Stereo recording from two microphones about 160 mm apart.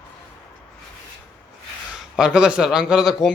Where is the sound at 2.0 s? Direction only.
5° right (ahead or behind).